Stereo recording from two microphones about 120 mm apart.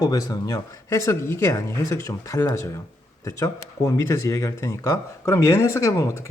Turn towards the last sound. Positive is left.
turn(degrees=25)  # may be behind; listen again after turning